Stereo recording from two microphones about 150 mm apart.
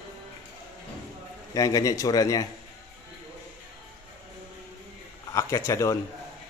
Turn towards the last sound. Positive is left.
turn(degrees=20)  # may be behind; listen again after turning